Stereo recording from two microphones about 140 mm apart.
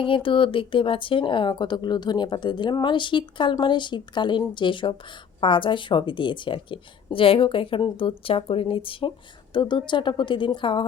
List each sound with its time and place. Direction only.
0.0 s a woman's voice: 40° left (ahead or behind)